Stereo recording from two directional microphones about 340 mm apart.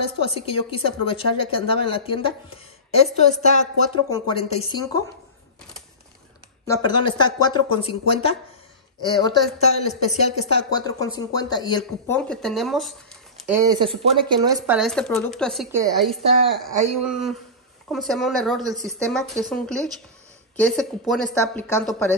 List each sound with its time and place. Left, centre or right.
0.0 s a woman's voice: centre
6.6 s a woman's voice: centre
13.7 s speech: centre
14.8 s speech: centre